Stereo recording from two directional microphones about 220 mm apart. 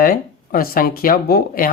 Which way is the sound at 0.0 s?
40° left (ahead or behind).